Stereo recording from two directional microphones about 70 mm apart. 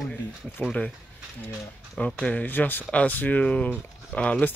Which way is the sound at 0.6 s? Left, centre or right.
Centre.